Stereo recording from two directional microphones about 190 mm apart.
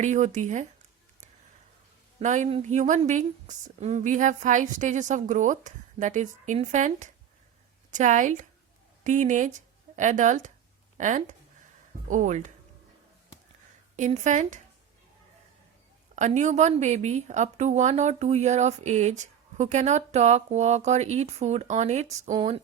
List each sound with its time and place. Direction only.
0.0 s a woman's voice: 40° right (ahead or behind)
2.1 s a woman's voice: 40° right (ahead or behind)
13.9 s a woman's voice: 40° right (ahead or behind)
16.1 s a woman's voice: 40° right (ahead or behind)